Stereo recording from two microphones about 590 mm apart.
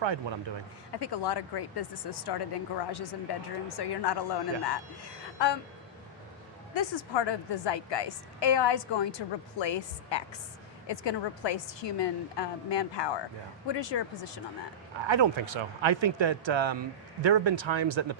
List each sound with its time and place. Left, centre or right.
0.0 s speech: right
0.9 s a woman's voice: left
6.7 s a woman's voice: left
15.0 s speech: right